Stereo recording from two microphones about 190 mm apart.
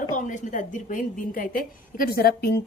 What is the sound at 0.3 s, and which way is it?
A woman's voice, 40° left (ahead or behind).